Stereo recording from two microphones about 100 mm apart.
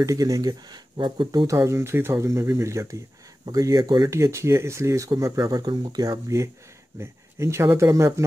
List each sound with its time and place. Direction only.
0.0 s speech: 35° right (ahead or behind); by 1.5 s 55° right (ahead or behind)
1.5 s speech: 30° right (ahead or behind)
4.1 s speech: 30° right (ahead or behind)
5.4 s speech: 45° right (ahead or behind); by 8.1 s 30° right (ahead or behind)